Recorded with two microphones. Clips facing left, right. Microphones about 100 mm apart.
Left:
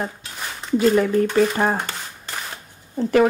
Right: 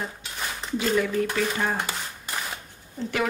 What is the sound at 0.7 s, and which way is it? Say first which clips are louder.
Speech: left 7 dB; 45° left (ahead or behind).